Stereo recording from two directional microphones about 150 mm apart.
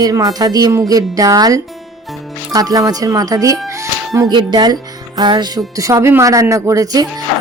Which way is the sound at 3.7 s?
20° right (ahead or behind).